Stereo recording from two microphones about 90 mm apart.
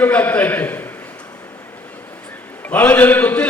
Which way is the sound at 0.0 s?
20° left (ahead or behind).